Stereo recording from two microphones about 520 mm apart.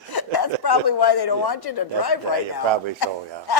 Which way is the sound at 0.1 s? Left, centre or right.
Left.